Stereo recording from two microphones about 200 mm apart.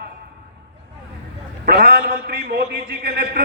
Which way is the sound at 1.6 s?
50° right (ahead or behind).